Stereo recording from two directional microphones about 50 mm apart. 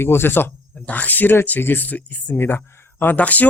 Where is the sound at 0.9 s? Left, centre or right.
Left.